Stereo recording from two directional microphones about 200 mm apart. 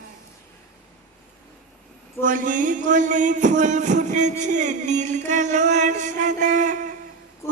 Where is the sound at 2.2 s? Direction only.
40° right (ahead or behind).